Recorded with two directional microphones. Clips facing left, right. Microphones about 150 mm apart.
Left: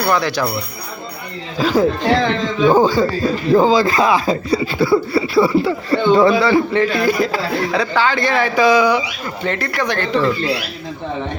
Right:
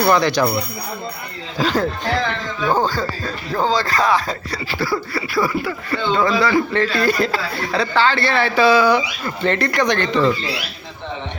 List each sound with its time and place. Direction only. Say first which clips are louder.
0.0 s speech: right 2 dB; 5° left (ahead or behind)
1.5 s speech: left 4 dB; 5° left (ahead or behind)
4.8 s speech: left 7 dB; 25° left (ahead or behind)
6.0 s speech: left 5 dB; 15° left (ahead or behind)